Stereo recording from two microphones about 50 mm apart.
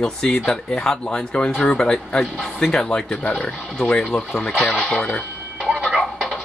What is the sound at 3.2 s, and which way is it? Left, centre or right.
Speech, left.